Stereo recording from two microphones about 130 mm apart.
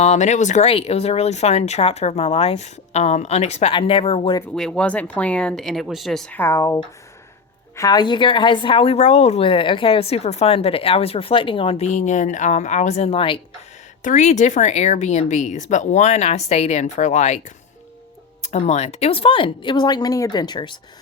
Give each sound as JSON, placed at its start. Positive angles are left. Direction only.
{"t": 0.0, "sound": "speech", "side_deg": 60}
{"t": 0.7, "sound": "speech", "side_deg": 50}
{"t": 3.7, "sound": "speech", "side_deg": 45}
{"t": 4.5, "sound": "speech", "side_deg": 5}
{"t": 6.3, "sound": "speech", "side_deg": 20}
{"t": 7.8, "sound": "speech", "side_deg": 30}
{"t": 9.5, "sound": "speech", "side_deg": 40}
{"t": 14.0, "sound": "speech", "side_deg": 70}
{"t": 18.4, "sound": "speech", "side_deg": 60}